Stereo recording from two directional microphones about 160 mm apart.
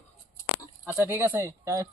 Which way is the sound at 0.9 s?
15° right (ahead or behind).